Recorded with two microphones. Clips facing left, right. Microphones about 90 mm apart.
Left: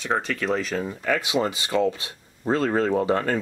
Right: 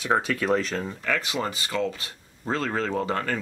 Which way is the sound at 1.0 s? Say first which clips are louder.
Left 5 dB; 15° left (ahead or behind).